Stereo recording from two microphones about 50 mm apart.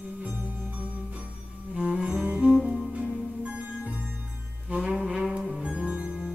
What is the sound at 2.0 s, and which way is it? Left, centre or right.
Music, right.